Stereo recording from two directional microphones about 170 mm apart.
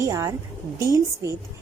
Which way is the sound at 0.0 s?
20° right (ahead or behind).